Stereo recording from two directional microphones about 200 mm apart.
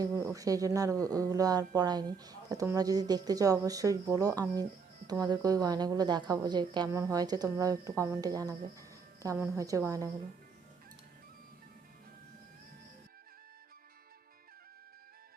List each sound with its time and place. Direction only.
0.3 s a woman's voice: 15° right (ahead or behind)